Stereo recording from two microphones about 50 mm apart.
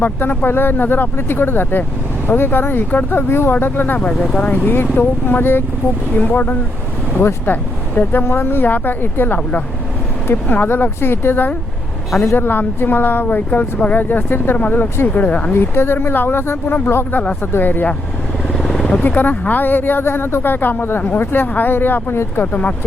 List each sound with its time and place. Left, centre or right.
0.0 s speech: left
4.1 s speech: centre
4.5 s speech: left
8.2 s speech: left
12.2 s a woman's voice: left
12.5 s speech: left
15.5 s speech: left
18.5 s vehicle: centre
19.0 s speech: left